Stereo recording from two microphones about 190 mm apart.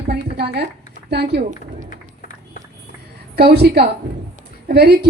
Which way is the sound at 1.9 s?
45° left (ahead or behind).